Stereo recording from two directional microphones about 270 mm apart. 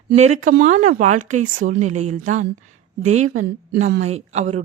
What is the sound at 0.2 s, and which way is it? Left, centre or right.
A woman's voice, right.